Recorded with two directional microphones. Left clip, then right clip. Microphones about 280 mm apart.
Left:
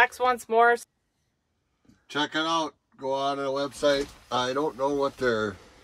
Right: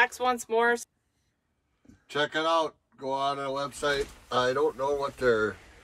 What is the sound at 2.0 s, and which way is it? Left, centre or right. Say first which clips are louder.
Speech: even; left.